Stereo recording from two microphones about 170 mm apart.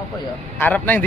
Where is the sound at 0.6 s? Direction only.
10° left (ahead or behind).